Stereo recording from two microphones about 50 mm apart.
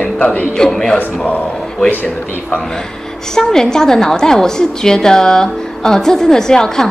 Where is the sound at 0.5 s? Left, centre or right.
Centre.